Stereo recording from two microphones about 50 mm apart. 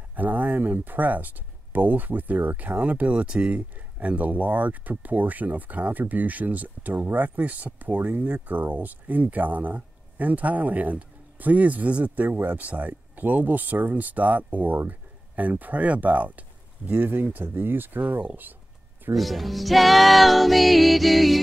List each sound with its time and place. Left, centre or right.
0.1 s speech: right
19.1 s speech: centre